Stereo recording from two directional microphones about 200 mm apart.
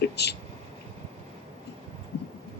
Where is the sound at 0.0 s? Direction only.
55° left (ahead or behind).